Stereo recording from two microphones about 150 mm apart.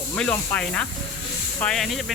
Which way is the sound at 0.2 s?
10° left (ahead or behind).